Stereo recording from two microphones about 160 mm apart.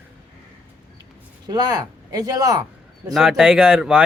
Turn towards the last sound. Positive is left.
turn(degrees=-5)  # may be behind; listen again after turning